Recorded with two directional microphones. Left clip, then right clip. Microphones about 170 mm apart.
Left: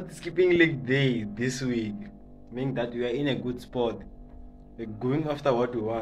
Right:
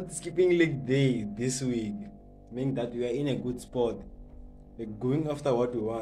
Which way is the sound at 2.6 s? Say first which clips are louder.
Left 2 dB; 20° right (ahead or behind).